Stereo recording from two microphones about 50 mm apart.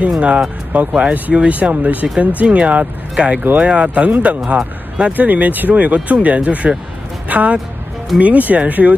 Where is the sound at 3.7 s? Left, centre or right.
Right.